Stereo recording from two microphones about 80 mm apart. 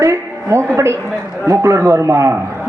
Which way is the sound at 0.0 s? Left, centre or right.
Right.